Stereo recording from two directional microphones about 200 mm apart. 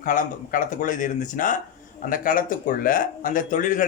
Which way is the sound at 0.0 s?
40° left (ahead or behind).